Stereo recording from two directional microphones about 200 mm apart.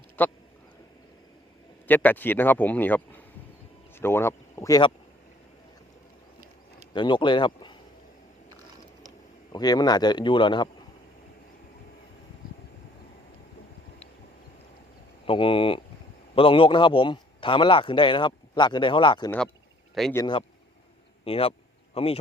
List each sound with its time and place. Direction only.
0.2 s speech: 10° left (ahead or behind)
1.9 s speech: 10° left (ahead or behind)
6.9 s a man's voice: 25° left (ahead or behind)
9.5 s a man's voice: 20° left (ahead or behind)
15.3 s a man's voice: 25° left (ahead or behind)
19.9 s speech: centre (ahead or behind)
20.1 s a man's voice: 20° left (ahead or behind)